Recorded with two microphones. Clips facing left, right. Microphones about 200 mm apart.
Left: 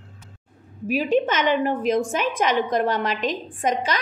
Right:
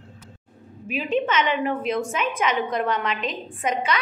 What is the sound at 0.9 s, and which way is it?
A woman's voice, 40° left (ahead or behind).